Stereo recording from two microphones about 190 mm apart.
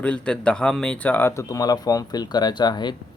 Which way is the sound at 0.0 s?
5° left (ahead or behind).